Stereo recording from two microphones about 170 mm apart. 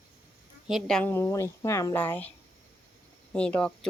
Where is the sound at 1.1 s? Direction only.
15° left (ahead or behind).